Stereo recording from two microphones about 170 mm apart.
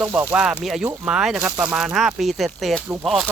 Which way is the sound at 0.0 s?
10° right (ahead or behind).